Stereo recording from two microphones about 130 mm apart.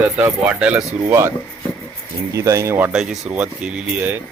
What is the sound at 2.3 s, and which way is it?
Speech, 25° right (ahead or behind).